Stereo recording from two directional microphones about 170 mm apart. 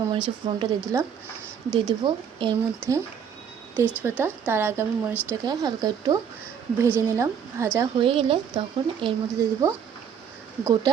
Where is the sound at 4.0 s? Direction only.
10° right (ahead or behind).